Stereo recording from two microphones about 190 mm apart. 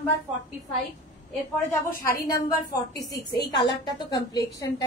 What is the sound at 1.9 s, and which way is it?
A woman's voice, 10° left (ahead or behind).